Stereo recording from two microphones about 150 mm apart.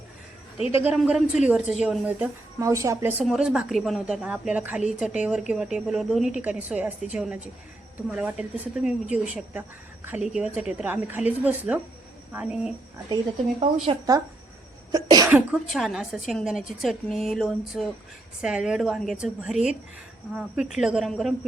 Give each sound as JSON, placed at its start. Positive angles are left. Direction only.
{"t": 0.7, "sound": "a woman's voice", "side_deg": -15}
{"t": 2.6, "sound": "a woman's voice", "side_deg": -20}
{"t": 3.2, "sound": "a woman's voice", "side_deg": -5}
{"t": 14.9, "sound": "a woman's voice", "side_deg": -25}
{"t": 15.3, "sound": "a woman's voice", "side_deg": -10}